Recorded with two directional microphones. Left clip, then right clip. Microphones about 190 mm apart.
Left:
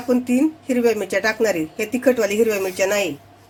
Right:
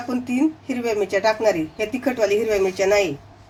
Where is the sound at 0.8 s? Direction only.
30° left (ahead or behind).